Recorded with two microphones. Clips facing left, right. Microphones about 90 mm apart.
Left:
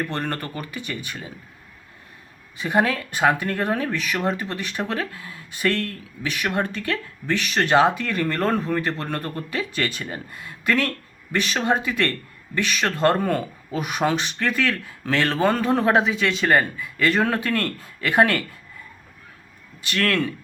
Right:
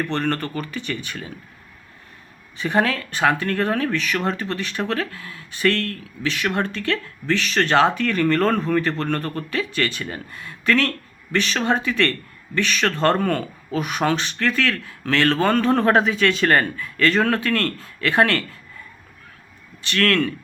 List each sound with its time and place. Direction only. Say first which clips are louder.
0.1 s speech: right 4 dB; 10° left (ahead or behind)
2.6 s speech: right 1 dB; 10° left (ahead or behind)
9.7 s speech: right 2 dB; 20° left (ahead or behind)
19.9 s speech: right 3 dB; 20° left (ahead or behind)